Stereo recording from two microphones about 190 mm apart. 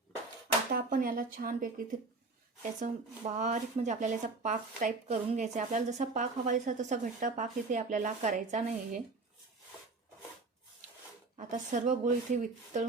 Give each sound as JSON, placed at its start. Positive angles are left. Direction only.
{"t": 0.7, "sound": "speech", "side_deg": -50}
{"t": 11.3, "sound": "speech", "side_deg": -40}